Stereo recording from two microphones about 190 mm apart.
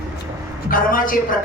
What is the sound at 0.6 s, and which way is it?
Music, 45° left (ahead or behind).